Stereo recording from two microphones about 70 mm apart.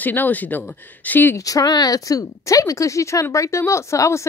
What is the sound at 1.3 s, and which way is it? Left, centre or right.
A woman's voice, left.